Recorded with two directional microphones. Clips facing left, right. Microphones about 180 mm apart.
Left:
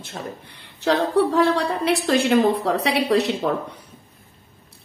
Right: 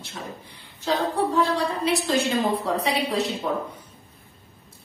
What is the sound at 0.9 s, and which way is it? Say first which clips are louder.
A woman's voice: left 5 dB; 70° left (ahead or behind).